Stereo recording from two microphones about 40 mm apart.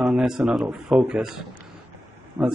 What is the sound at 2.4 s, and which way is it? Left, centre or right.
Speech, right.